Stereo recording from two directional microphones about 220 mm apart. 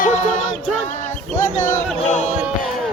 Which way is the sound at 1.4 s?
35° left (ahead or behind).